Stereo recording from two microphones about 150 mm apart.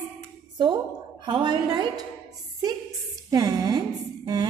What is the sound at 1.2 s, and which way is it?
Speech, 30° right (ahead or behind).